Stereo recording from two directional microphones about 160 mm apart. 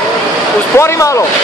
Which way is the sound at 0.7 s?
20° left (ahead or behind).